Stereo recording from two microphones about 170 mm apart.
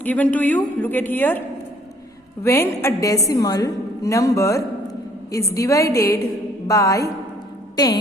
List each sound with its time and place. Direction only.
0.0 s a man's voice: 10° left (ahead or behind)
2.4 s a woman's voice: 15° left (ahead or behind)